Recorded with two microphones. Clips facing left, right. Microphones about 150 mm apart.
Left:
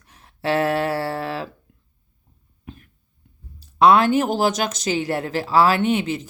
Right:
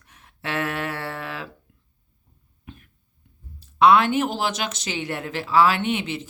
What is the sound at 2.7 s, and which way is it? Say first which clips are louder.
Cough: left 4 dB; 40° left (ahead or behind).